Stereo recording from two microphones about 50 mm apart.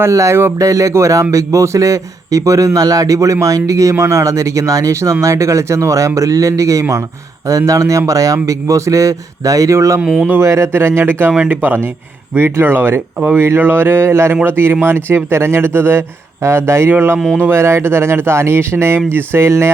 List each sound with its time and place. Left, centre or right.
0.0 s a man's voice: right
0.3 s a man's voice: right
10.0 s speech: centre
10.4 s speech: right
10.7 s speech: right
11.0 s speech: right
14.4 s speech: right
16.9 s speech: right
17.5 s speech: right